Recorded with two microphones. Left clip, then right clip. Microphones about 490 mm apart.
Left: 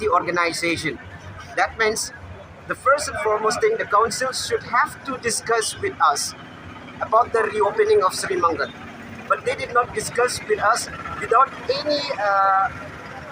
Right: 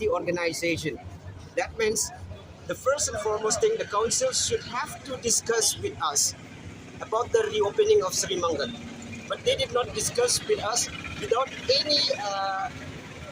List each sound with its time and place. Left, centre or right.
0.1 s speech: right